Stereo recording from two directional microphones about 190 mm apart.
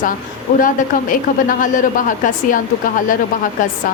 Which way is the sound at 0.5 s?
45° left (ahead or behind).